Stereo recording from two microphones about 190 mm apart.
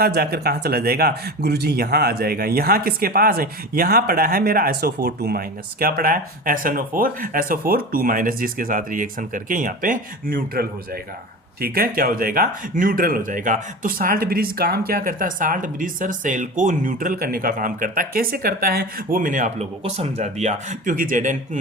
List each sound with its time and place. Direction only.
0.0 s speech: 55° right (ahead or behind)